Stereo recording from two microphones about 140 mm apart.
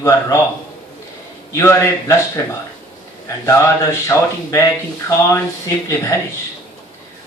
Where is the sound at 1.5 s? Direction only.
20° left (ahead or behind).